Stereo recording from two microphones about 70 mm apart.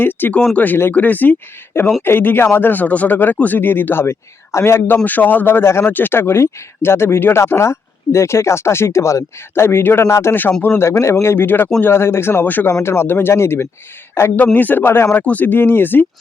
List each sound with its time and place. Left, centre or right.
0.2 s speech: left
5.0 s speech: left
14.3 s speech: left